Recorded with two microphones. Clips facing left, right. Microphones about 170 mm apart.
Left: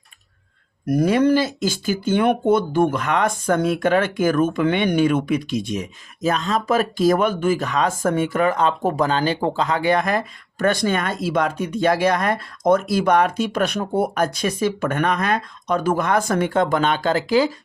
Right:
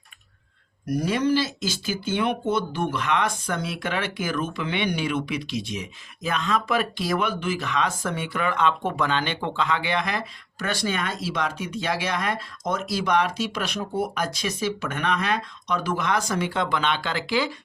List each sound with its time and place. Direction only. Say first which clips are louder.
0.9 s speech: left 6 dB; 55° left (ahead or behind)